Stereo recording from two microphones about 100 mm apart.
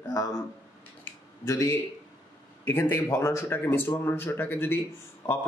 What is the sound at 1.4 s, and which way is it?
Speech, 30° left (ahead or behind).